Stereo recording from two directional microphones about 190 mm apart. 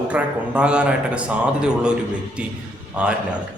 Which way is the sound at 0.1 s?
5° right (ahead or behind).